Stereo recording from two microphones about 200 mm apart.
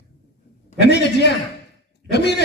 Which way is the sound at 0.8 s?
55° left (ahead or behind).